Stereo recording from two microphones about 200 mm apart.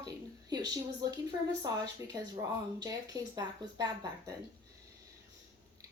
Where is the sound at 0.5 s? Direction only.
20° right (ahead or behind).